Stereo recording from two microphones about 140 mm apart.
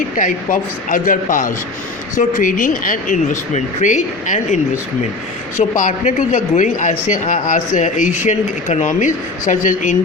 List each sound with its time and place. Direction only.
0.2 s speech: 65° left (ahead or behind)